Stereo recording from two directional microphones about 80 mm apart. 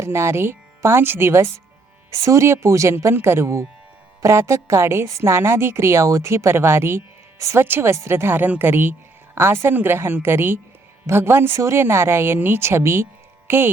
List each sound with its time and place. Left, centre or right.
0.0 s a woman's voice: right
13.5 s music: right